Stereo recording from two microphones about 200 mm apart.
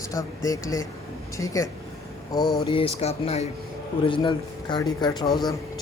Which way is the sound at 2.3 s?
20° left (ahead or behind).